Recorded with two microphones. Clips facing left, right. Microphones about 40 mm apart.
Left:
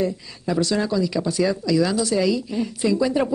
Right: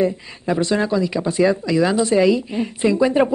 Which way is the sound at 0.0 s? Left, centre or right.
Right.